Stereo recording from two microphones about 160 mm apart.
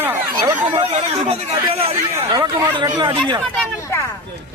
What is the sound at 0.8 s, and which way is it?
Speech, 40° right (ahead or behind).